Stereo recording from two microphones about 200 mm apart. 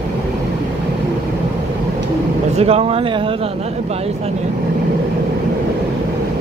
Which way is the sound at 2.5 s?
30° right (ahead or behind).